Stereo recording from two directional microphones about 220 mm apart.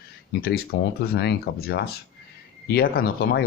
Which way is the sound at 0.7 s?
45° left (ahead or behind).